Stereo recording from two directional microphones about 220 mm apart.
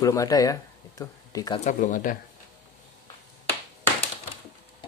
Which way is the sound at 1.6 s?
35° left (ahead or behind).